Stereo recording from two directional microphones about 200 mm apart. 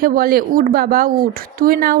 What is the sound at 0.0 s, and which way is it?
Speech, 45° right (ahead or behind).